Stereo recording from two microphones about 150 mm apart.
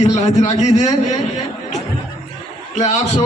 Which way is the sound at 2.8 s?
50° left (ahead or behind).